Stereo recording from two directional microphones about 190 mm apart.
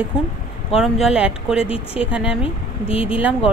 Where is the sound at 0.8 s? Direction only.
5° right (ahead or behind).